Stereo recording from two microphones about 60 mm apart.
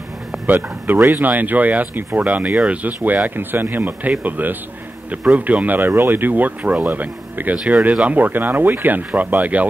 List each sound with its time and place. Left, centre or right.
0.5 s speech: right
5.8 s speech: right